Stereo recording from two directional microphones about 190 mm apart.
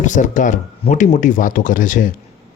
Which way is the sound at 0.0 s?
40° left (ahead or behind).